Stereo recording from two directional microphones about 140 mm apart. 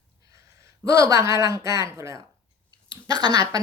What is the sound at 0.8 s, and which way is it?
Speech, 25° right (ahead or behind).